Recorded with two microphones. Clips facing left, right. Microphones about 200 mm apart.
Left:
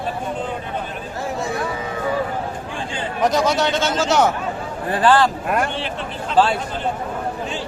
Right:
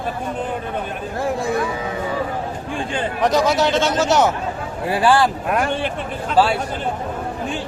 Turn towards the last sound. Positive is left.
turn(degrees=-10)  # may be behind; listen again after turning